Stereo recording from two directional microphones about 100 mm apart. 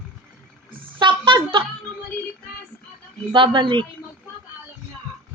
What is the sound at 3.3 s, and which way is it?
Speech, 55° right (ahead or behind).